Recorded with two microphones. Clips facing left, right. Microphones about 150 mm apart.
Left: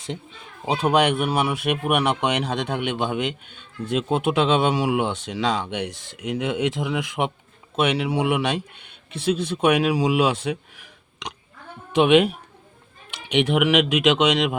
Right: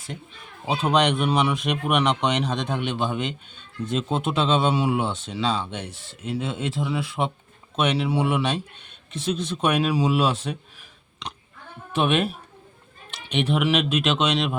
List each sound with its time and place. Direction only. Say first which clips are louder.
0.6 s speech: left 2 dB; 15° left (ahead or behind)
11.9 s speech: left 6 dB; 15° left (ahead or behind)